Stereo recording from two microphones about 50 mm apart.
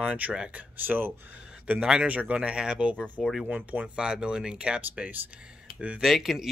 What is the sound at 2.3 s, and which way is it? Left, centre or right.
Speech, centre.